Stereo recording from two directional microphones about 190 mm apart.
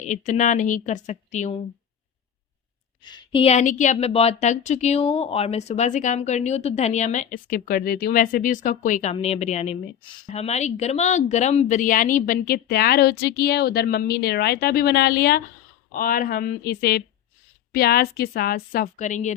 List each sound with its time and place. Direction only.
0.0 s a woman's voice: 40° left (ahead or behind)
3.0 s a woman's voice: 25° left (ahead or behind); by 19.3 s 40° left (ahead or behind)